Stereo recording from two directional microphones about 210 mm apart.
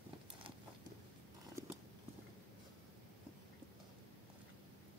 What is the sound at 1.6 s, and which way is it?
Horse, 15° right (ahead or behind).